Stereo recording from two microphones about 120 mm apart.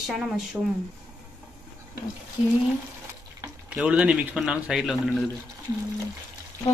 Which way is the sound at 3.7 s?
10° right (ahead or behind).